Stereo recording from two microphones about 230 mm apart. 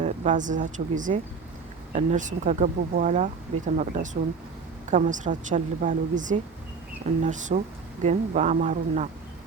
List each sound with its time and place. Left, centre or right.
0.0 s a woman's voice: right